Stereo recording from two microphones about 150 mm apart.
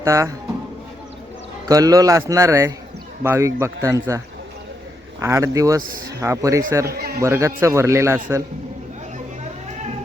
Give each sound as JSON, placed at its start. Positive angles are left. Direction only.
{"t": 0.0, "sound": "speech", "side_deg": -20}
{"t": 1.6, "sound": "speech", "side_deg": -25}
{"t": 5.2, "sound": "speech", "side_deg": -20}
{"t": 6.8, "sound": "a man's voice", "side_deg": -90}
{"t": 7.2, "sound": "speech", "side_deg": -20}